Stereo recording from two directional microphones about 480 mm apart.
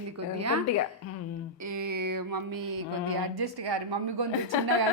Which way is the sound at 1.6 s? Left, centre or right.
Right.